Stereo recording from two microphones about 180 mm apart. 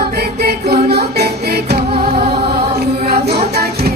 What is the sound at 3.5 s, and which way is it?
Music, 60° right (ahead or behind).